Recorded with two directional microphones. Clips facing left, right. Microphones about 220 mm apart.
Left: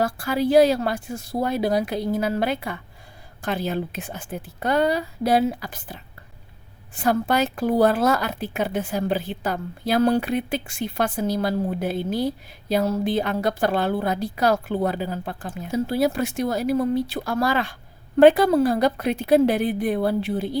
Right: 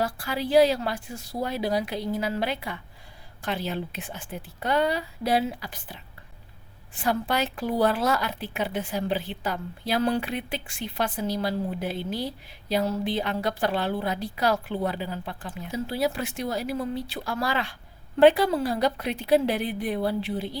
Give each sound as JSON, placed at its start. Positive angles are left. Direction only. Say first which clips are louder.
{"t": 0.0, "sound": "a woman's voice", "louder": "left 6 dB", "side_deg": 45}